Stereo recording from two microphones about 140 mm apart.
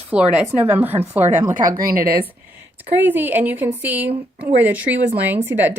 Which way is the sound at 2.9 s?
15° right (ahead or behind).